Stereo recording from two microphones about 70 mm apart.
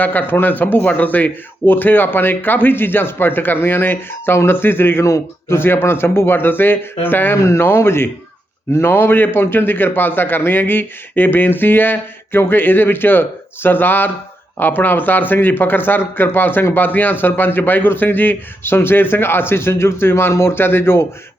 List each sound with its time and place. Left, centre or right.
0.0 s a man's voice: left